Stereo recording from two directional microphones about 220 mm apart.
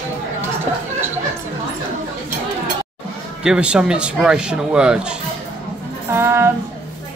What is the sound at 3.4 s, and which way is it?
Speech, 5° right (ahead or behind).